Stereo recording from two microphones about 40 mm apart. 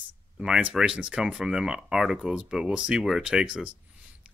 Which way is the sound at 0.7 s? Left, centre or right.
Right.